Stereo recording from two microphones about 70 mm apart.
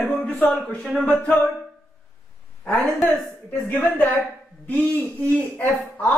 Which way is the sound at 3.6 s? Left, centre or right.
Left.